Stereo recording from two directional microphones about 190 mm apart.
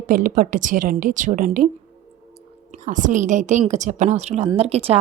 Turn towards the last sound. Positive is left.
turn(degrees=-30)  # may be behind; listen again after turning